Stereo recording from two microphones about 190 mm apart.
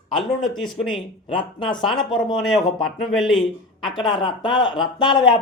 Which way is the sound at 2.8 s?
Centre (ahead or behind).